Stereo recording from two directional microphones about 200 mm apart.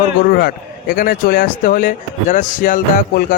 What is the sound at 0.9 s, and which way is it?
Speech, 45° left (ahead or behind).